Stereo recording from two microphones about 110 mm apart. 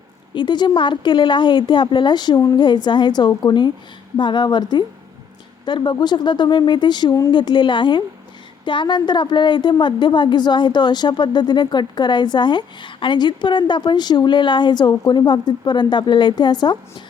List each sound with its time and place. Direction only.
0.3 s a woman's voice: 45° left (ahead or behind)